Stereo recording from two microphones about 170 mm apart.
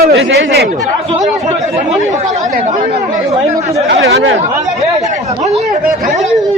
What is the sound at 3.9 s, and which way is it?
Speech, 85° right.